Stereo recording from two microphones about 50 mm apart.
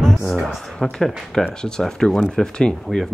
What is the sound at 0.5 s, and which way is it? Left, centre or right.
Speech, centre.